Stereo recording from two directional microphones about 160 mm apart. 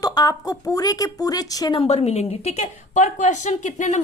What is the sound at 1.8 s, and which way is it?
A woman's voice, 40° left (ahead or behind).